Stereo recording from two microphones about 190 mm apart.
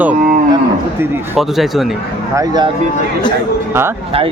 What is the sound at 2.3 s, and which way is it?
Speech, 20° right (ahead or behind).